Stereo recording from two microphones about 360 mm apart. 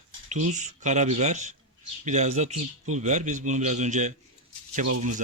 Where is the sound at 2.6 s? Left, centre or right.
Right.